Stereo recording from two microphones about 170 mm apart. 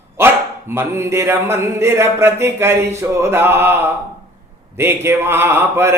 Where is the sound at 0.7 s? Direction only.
15° right (ahead or behind).